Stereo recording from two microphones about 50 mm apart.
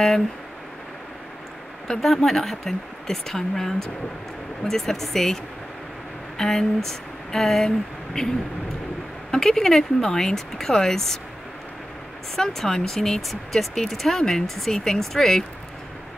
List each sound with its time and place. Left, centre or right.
1.9 s speech: centre
12.4 s speech: centre